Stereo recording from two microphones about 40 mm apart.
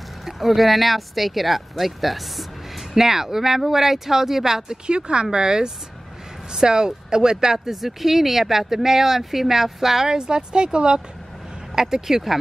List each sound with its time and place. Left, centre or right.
0.2 s speech: centre
4.8 s speech: right; by 10.1 s centre
10.1 s speech: right
11.7 s speech: centre